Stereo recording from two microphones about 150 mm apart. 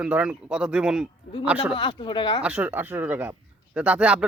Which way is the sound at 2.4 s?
10° right (ahead or behind).